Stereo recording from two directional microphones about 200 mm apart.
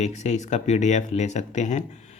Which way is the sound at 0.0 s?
35° left (ahead or behind).